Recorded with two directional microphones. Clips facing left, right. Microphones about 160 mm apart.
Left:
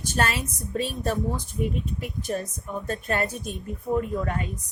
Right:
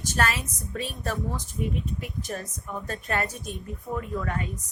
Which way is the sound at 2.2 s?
25° left (ahead or behind).